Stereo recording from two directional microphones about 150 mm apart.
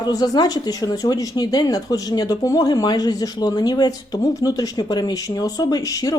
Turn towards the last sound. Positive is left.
turn(degrees=25)  # may be behind; listen again after turning